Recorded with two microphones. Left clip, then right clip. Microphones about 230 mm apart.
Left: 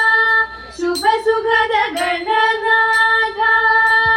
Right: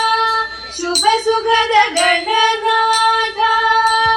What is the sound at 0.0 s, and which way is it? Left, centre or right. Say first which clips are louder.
Music: left 2 dB; left.